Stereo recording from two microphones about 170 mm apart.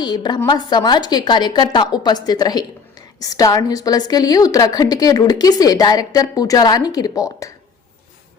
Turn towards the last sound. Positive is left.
turn(degrees=20)  # may be behind; listen again after turning